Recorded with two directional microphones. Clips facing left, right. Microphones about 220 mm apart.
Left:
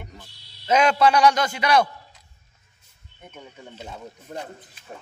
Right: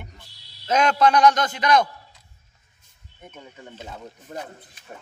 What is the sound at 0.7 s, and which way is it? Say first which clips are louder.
A man's voice: left 1 dB; 5° left (ahead or behind).